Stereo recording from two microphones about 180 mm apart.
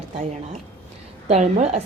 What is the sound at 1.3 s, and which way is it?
Speech, 40° right (ahead or behind).